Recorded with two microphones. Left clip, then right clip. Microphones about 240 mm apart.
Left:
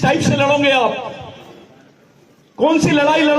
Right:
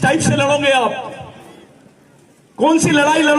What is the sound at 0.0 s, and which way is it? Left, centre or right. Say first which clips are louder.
A man's voice: even; right.